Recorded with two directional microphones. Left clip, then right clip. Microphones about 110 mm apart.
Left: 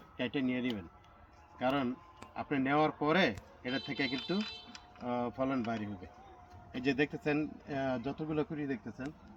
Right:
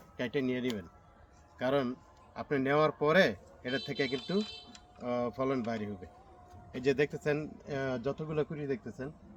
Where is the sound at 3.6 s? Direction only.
10° right (ahead or behind).